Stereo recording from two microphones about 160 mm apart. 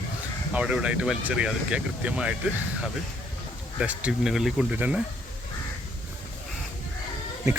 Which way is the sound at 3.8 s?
5° right (ahead or behind).